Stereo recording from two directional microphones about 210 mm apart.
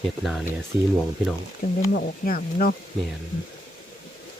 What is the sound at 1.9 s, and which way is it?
Speech, 45° left (ahead or behind).